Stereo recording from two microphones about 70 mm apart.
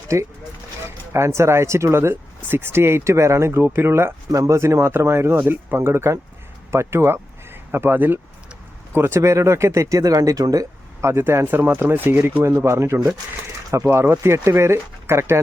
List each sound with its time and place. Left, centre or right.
0.1 s speech: right
4.3 s speech: right
11.0 s speech: right
12.4 s speech: right